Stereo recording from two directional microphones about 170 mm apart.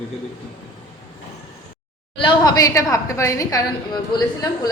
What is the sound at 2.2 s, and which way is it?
A woman's voice, 25° left (ahead or behind).